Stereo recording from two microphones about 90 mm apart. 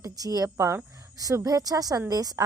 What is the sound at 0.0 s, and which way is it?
A woman's voice, 40° right (ahead or behind).